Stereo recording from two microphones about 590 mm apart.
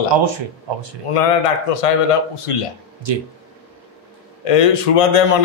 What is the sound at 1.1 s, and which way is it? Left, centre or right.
A man's voice, left.